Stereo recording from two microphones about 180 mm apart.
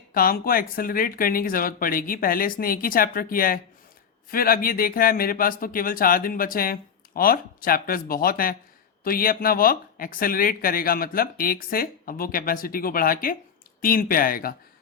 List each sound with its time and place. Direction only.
0.1 s speech: 55° left (ahead or behind)